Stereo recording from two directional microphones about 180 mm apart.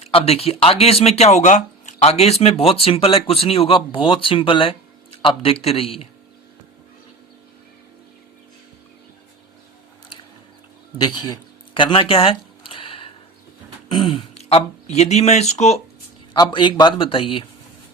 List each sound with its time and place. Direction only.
0.0 s speech: 35° left (ahead or behind)
11.0 s a sound: 25° left (ahead or behind)
13.8 s speech: 25° left (ahead or behind)
16.3 s a man's voice: 25° left (ahead or behind)